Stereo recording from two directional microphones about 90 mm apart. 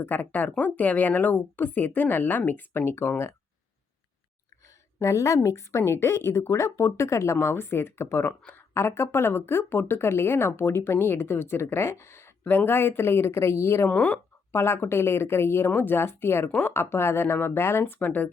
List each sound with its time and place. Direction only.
0.0 s a woman's voice: 20° left (ahead or behind)
4.9 s a woman's voice: 35° left (ahead or behind)
13.9 s speech: 15° left (ahead or behind)
14.5 s a woman's voice: 30° left (ahead or behind)